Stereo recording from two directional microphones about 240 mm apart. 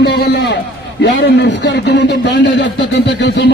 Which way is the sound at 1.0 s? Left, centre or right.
Left.